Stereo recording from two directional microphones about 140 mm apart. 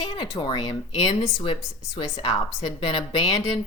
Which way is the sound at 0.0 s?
35° left (ahead or behind).